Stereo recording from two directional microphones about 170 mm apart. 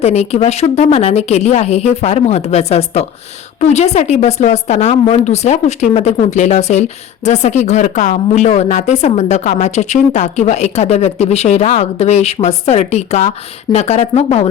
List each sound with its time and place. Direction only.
0.0 s a woman's voice: 40° left (ahead or behind)